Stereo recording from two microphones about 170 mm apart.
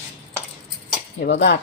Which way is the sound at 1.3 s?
90° left.